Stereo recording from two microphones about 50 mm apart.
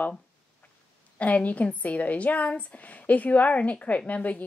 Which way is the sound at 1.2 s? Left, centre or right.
Left.